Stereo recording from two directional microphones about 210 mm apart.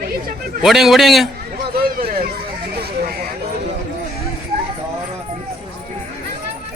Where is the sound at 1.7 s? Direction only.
45° right (ahead or behind).